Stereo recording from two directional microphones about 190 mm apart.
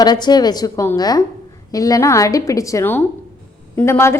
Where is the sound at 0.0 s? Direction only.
20° left (ahead or behind).